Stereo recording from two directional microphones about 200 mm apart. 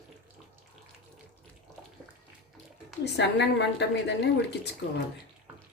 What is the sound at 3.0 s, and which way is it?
A woman's voice, 60° left (ahead or behind).